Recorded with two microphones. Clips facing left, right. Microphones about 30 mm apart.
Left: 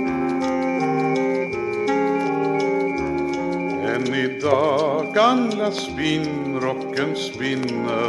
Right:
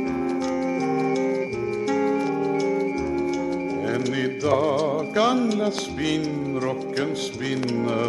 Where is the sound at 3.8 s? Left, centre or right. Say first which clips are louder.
Left 3 dB; centre.